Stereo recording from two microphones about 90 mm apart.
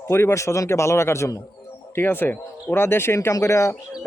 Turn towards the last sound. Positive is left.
turn(degrees=30)  # may be behind; listen again after turning